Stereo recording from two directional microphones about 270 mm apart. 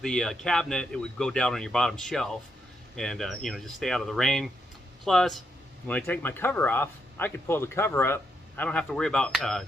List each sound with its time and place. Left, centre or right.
0.0 s speech: centre